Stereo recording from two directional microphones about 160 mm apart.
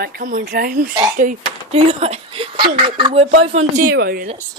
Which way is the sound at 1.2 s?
55° right (ahead or behind).